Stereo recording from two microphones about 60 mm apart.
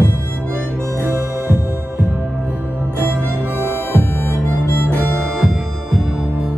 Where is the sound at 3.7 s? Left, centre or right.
Left.